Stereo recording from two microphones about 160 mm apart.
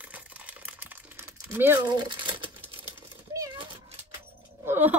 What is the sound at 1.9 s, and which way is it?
Crumpling, 30° right (ahead or behind).